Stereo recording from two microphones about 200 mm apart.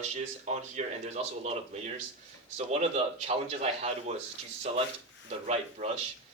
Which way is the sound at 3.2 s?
35° right (ahead or behind).